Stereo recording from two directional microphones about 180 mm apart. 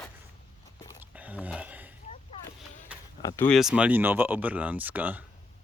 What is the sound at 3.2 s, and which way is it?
Speech, 15° left (ahead or behind).